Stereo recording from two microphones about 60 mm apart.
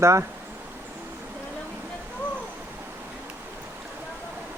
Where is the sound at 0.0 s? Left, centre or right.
Right.